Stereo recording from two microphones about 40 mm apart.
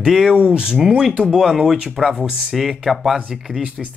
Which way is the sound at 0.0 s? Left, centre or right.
Centre.